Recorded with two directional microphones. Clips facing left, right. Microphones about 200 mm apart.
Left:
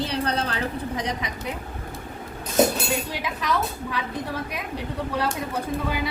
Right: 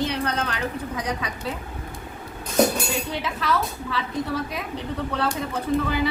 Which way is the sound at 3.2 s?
15° left (ahead or behind).